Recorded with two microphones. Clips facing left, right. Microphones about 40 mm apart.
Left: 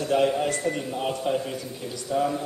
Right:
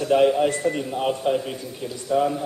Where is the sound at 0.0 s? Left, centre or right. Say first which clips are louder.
Right 5 dB; centre.